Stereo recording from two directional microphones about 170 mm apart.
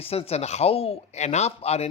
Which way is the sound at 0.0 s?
35° left (ahead or behind).